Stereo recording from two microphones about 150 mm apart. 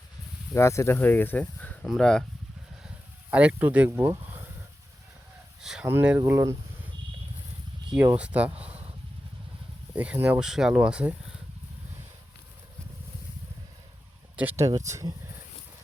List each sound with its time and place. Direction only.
0.5 s speech: 20° left (ahead or behind)
3.2 s speech: 10° right (ahead or behind)
5.8 s speech: 10° right (ahead or behind)
7.9 s speech: 10° right (ahead or behind)
9.9 s speech: 10° right (ahead or behind)
14.3 s speech: 15° right (ahead or behind)